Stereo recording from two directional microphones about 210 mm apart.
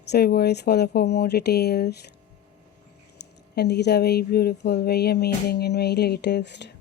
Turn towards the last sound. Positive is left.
turn(degrees=55)  # may be behind; listen again after turning